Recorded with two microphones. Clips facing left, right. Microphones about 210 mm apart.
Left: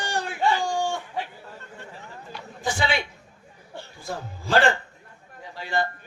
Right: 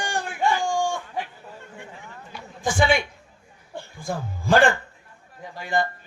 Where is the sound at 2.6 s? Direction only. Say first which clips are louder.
Right 5 dB; 50° right (ahead or behind).